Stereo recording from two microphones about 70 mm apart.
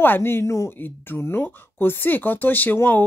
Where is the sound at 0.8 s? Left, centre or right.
Left.